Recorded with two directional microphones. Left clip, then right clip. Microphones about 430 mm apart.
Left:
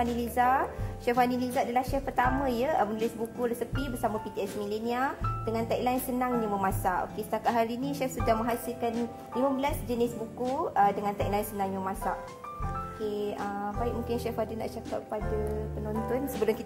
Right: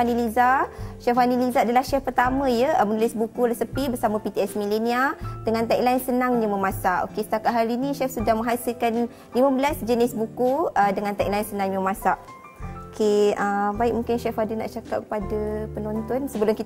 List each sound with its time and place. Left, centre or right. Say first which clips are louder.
0.0 s a woman's voice: right 7 dB; right
13.0 s music: right 15 dB; right
13.6 s speech: right 10 dB; right
16.4 s a woman's voice: right 6 dB; right